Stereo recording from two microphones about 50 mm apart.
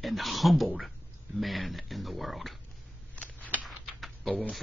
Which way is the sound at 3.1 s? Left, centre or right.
Left.